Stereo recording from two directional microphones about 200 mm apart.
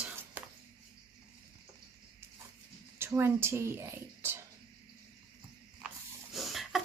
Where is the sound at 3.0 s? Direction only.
10° right (ahead or behind).